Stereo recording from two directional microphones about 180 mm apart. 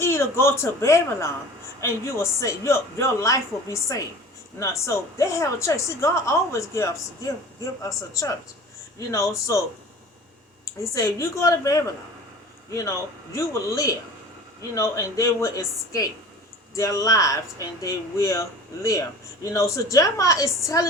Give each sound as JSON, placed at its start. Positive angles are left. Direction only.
{"t": 0.0, "sound": "speech", "side_deg": 15}
{"t": 10.7, "sound": "speech", "side_deg": 15}
{"t": 13.3, "sound": "speech", "side_deg": 15}